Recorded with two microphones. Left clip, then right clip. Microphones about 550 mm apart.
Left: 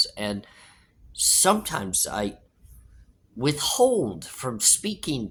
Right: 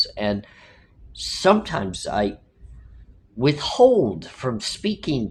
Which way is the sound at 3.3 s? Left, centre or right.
Left.